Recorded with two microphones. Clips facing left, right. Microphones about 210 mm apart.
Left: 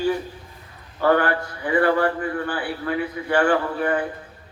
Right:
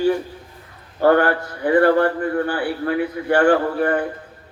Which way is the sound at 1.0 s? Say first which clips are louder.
Right 4 dB; 40° right (ahead or behind).